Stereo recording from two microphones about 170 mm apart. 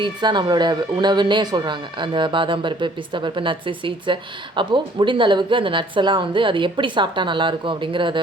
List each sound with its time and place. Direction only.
0.0 s speech: 25° right (ahead or behind)